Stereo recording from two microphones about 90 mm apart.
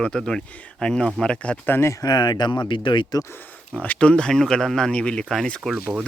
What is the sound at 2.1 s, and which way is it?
Speech, 50° left (ahead or behind).